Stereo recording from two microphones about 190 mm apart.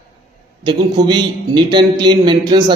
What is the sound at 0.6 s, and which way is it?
Speech, 20° right (ahead or behind).